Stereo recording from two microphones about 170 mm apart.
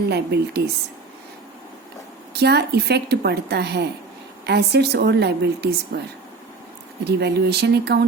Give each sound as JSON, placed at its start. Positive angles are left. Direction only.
{"t": 0.1, "sound": "a woman's voice", "side_deg": -75}
{"t": 2.3, "sound": "a woman's voice", "side_deg": -75}
{"t": 7.0, "sound": "a woman's voice", "side_deg": -80}